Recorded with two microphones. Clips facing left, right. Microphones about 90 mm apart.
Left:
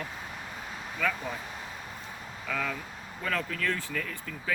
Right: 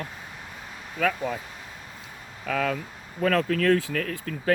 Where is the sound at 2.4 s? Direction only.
80° right.